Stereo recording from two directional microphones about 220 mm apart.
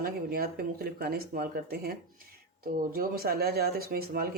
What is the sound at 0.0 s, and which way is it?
Speech, 40° right (ahead or behind).